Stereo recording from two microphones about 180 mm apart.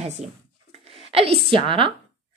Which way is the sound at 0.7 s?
35° right (ahead or behind).